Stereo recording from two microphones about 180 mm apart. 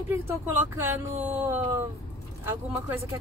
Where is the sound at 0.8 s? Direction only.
10° right (ahead or behind).